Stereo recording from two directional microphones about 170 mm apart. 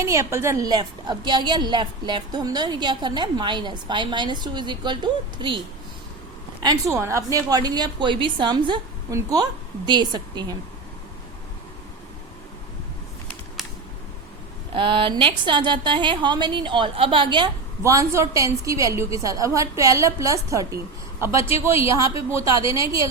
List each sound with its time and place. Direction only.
0.0 s a woman's voice: 15° right (ahead or behind)
6.6 s a woman's voice: 20° right (ahead or behind)
14.7 s a woman's voice: 30° right (ahead or behind)